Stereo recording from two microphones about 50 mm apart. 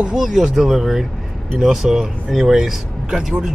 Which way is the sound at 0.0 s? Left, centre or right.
Centre.